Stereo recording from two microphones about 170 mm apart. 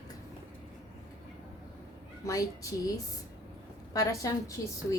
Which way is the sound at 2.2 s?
20° left (ahead or behind).